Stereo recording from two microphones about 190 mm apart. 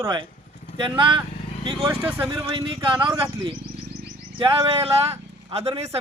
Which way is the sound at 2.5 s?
25° right (ahead or behind).